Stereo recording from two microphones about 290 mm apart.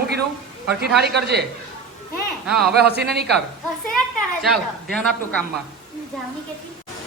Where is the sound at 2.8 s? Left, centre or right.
Right.